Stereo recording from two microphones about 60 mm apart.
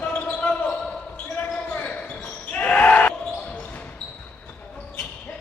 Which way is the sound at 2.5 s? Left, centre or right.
Left.